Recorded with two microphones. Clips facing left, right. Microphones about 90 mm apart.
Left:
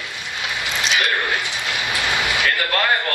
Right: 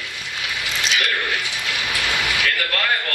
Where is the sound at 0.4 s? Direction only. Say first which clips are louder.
Left 2 dB; 30° left (ahead or behind).